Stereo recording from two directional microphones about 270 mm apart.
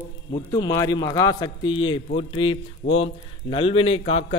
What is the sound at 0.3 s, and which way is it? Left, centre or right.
A man's voice, centre.